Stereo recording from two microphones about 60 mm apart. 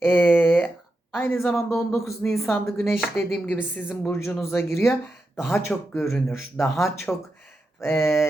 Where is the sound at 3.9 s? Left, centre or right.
Left.